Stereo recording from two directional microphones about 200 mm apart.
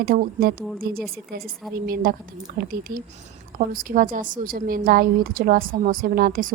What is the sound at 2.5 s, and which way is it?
A woman's voice, 50° right (ahead or behind).